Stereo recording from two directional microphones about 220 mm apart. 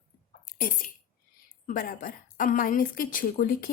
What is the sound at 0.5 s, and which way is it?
Speech, 40° left (ahead or behind).